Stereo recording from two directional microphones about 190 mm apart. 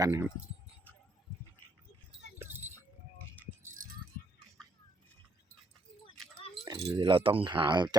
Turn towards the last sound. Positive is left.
turn(degrees=-20)  # may be behind; listen again after turning